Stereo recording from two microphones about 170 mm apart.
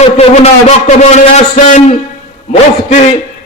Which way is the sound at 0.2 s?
40° left (ahead or behind).